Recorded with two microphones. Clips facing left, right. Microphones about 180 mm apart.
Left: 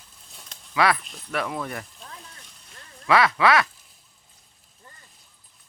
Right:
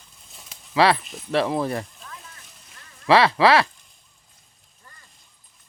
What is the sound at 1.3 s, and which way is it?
Speech, 30° right (ahead or behind).